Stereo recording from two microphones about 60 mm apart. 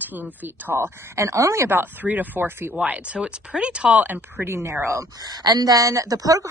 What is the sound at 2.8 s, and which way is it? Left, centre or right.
Speech, right.